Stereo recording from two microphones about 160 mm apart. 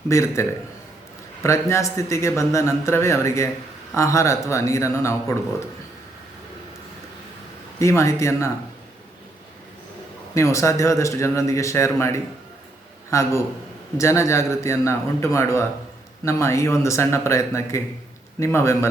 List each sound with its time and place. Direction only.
0.1 s a man's voice: 20° left (ahead or behind)
7.8 s speech: 20° left (ahead or behind)
10.3 s a man's voice: 20° left (ahead or behind)